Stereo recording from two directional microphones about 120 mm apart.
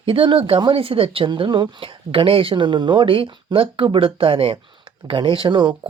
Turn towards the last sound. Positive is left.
turn(degrees=-40)  # may be behind; listen again after turning